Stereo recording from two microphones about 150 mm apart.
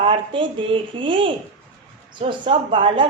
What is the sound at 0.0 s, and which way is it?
Speech, 35° right (ahead or behind).